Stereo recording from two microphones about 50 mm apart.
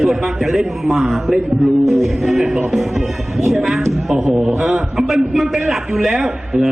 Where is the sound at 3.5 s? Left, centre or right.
Centre.